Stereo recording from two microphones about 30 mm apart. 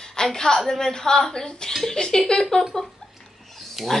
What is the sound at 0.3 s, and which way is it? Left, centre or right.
Speech, centre.